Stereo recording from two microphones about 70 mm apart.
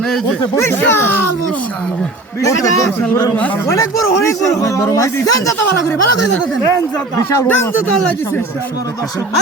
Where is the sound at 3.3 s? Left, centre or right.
Left.